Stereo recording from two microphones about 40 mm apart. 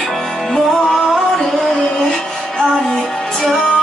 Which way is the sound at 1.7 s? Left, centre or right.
Centre.